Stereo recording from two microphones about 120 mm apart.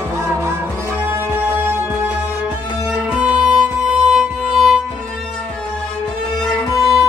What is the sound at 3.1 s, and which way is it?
Music, 10° right (ahead or behind).